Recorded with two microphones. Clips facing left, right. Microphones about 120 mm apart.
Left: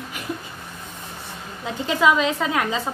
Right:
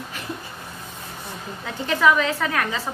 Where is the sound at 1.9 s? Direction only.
20° left (ahead or behind).